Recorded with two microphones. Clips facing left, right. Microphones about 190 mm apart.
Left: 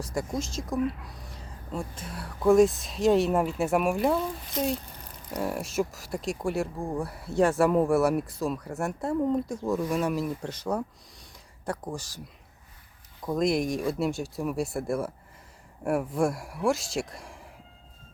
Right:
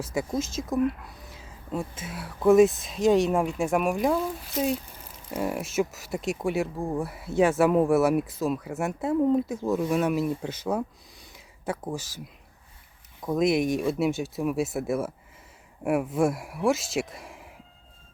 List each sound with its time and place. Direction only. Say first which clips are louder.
0.0 s speech: right 2 dB; 5° right (ahead or behind)
13.2 s speech: right 2 dB; centre (ahead or behind)